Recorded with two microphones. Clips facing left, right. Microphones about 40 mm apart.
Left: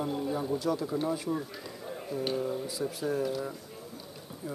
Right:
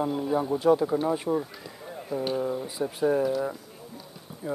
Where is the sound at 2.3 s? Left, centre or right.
Centre.